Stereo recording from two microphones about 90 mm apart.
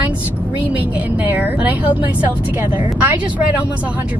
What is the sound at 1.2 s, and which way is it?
Speech, 20° right (ahead or behind).